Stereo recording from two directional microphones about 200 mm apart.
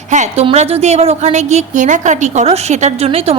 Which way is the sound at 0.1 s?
35° right (ahead or behind).